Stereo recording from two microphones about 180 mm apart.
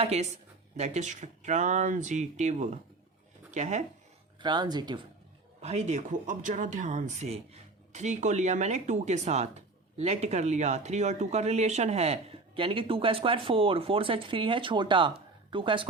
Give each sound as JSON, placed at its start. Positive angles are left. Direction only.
{"t": 0.0, "sound": "speech", "side_deg": -35}
{"t": 4.4, "sound": "speech", "side_deg": -25}
{"t": 5.6, "sound": "speech", "side_deg": -40}